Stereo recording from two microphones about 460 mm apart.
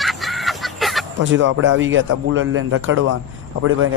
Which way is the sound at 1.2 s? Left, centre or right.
Right.